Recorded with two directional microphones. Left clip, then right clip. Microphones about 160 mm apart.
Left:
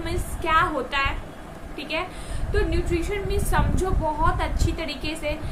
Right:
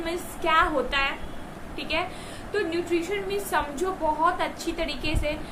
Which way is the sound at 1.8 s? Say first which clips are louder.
Even; 5° left (ahead or behind).